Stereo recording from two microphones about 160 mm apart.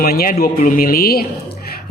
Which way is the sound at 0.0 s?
70° left (ahead or behind).